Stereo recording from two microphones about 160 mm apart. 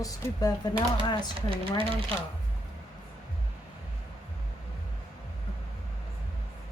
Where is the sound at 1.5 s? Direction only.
35° right (ahead or behind).